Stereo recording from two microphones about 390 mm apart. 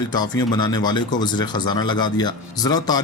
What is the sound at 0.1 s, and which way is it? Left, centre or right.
Speech, centre.